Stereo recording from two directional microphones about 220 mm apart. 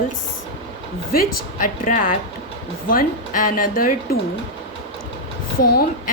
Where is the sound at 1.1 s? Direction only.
40° left (ahead or behind).